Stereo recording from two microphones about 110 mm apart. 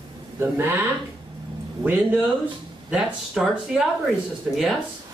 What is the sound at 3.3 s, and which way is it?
Speech, centre (ahead or behind).